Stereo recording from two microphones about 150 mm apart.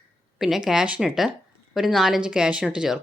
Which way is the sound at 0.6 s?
5° right (ahead or behind).